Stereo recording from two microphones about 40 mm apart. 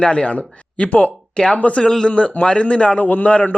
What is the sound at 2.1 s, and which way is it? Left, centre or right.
Speech, left.